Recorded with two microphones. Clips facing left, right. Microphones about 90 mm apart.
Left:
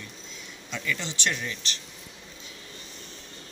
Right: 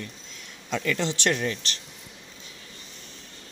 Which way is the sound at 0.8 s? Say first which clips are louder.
Right 5 dB; 50° right (ahead or behind).